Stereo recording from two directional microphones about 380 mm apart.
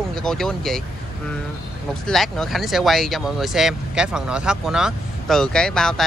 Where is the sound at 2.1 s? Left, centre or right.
Centre.